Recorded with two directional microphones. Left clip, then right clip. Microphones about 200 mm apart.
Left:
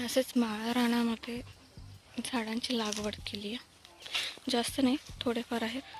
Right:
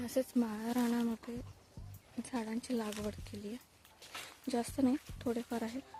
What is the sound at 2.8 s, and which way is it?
Speech, 15° left (ahead or behind).